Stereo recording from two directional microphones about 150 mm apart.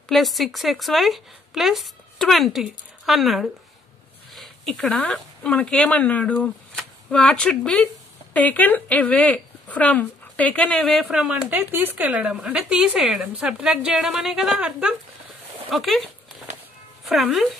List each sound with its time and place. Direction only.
0.1 s speech: centre (ahead or behind)
15.7 s dog: centre (ahead or behind)
17.1 s speech: centre (ahead or behind)